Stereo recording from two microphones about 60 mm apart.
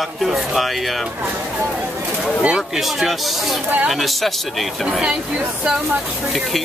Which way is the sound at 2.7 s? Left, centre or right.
Centre.